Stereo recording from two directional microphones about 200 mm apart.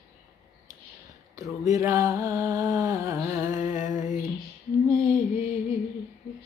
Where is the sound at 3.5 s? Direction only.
40° left (ahead or behind).